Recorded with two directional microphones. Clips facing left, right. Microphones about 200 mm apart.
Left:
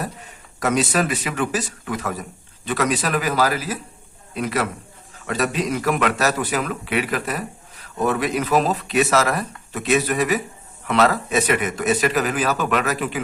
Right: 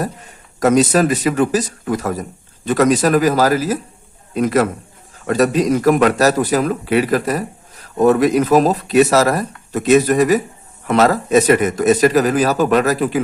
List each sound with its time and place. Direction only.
0.6 s a man's voice: 40° right (ahead or behind)